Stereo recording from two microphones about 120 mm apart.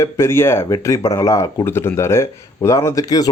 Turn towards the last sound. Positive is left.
turn(degrees=30)  # may be behind; listen again after turning